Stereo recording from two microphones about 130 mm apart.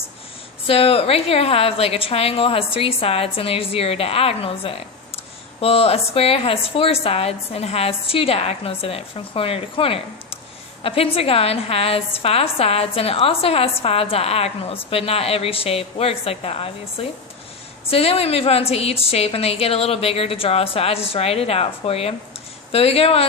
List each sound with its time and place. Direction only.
0.7 s a woman's voice: 50° left (ahead or behind)